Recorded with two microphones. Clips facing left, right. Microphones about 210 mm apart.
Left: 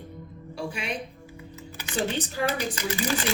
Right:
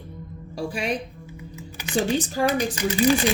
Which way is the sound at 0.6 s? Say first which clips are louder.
Right 5 dB; 40° right (ahead or behind).